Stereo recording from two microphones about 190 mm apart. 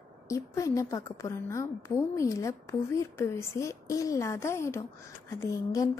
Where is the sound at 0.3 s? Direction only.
15° left (ahead or behind).